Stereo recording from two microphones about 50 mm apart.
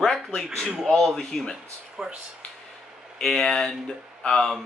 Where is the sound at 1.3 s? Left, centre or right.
Centre.